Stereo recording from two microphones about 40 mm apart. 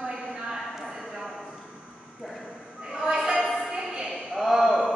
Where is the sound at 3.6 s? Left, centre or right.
Centre.